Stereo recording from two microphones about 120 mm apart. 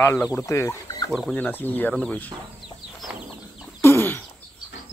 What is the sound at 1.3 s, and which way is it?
Speech, 15° left (ahead or behind).